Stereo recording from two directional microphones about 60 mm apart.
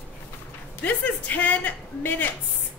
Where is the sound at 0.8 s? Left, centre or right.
Left.